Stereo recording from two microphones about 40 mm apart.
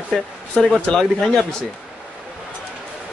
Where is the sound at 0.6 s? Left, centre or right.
Centre.